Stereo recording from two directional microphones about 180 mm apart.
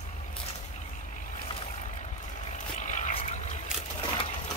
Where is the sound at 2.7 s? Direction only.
40° left (ahead or behind).